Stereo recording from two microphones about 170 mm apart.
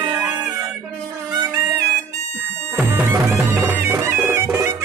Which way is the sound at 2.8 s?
15° right (ahead or behind).